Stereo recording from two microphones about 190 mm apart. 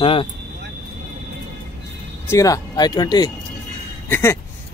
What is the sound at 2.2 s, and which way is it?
Speech, 15° left (ahead or behind).